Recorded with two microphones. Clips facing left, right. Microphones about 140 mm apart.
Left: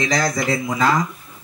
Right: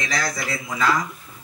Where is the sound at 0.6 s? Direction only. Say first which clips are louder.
Left 1 dB; 45° left (ahead or behind).